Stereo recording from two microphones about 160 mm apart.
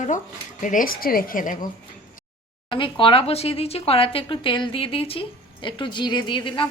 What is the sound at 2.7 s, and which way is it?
Speech, 30° left (ahead or behind).